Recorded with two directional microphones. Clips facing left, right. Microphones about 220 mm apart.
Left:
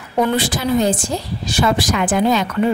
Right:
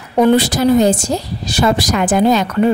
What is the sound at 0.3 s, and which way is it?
A woman's voice, 40° right (ahead or behind).